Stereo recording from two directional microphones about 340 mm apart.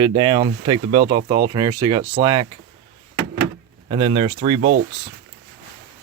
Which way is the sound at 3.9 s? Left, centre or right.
Centre.